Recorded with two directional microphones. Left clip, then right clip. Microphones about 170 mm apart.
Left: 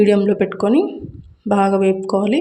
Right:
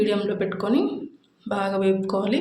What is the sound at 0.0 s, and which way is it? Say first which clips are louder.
Speech: left 9 dB; 45° left (ahead or behind).